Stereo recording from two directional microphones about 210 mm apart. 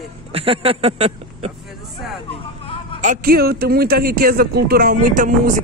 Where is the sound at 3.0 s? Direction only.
40° right (ahead or behind).